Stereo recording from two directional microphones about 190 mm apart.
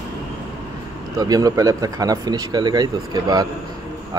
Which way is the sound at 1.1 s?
20° right (ahead or behind).